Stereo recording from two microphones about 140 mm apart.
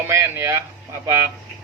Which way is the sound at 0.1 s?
20° right (ahead or behind).